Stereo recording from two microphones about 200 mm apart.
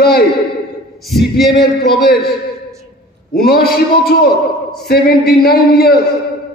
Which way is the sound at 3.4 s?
50° left (ahead or behind).